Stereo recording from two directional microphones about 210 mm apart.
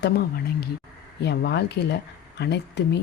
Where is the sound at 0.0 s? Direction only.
50° left (ahead or behind).